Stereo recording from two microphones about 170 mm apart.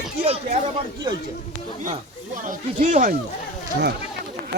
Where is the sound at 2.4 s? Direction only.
50° right (ahead or behind).